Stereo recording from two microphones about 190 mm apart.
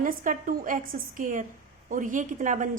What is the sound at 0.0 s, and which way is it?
A woman's voice, 45° right (ahead or behind).